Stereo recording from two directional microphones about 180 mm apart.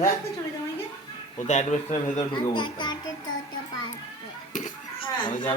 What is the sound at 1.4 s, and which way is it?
Speech, 40° left (ahead or behind).